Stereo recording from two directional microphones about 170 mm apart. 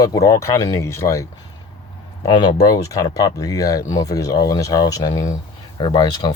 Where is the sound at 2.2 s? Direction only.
25° left (ahead or behind).